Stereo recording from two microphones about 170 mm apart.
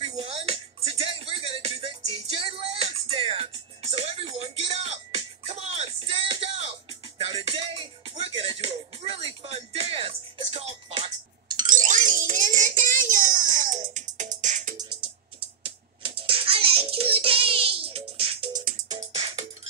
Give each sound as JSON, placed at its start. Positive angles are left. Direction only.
{"t": 0.0, "sound": "music", "side_deg": -35}
{"t": 11.6, "sound": "music", "side_deg": -50}
{"t": 15.6, "sound": "music", "side_deg": -30}
{"t": 18.6, "sound": "music", "side_deg": -55}
{"t": 19.1, "sound": "music", "side_deg": -30}